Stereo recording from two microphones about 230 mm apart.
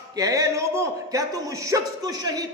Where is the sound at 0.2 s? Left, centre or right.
Centre.